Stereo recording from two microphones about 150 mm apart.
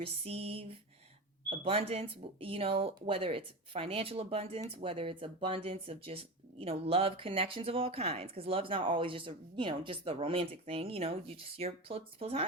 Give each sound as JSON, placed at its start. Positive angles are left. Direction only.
{"t": 0.0, "sound": "speech", "side_deg": -40}